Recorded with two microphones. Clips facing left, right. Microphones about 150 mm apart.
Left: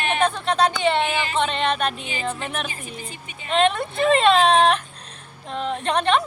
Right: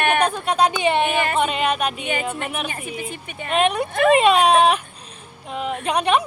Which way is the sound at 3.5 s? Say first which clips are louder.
Right 1 dB; 15° right (ahead or behind).